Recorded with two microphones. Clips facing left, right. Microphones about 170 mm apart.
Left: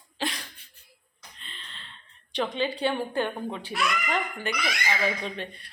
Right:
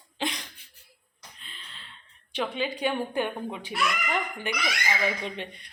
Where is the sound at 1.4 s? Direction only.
5° right (ahead or behind).